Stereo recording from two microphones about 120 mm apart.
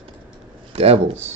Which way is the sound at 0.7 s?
60° right (ahead or behind).